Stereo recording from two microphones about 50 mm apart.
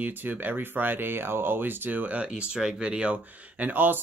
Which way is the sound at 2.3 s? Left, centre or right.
Centre.